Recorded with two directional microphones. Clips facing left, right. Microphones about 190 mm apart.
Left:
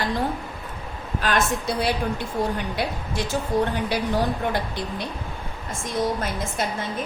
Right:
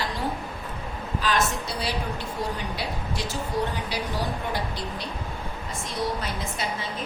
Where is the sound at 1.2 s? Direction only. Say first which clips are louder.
Left 2 dB; 55° left (ahead or behind).